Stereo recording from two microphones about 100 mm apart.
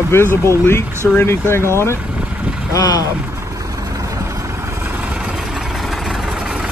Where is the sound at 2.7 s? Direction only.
40° left (ahead or behind).